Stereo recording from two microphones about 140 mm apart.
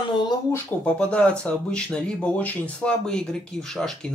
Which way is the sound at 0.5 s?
10° left (ahead or behind).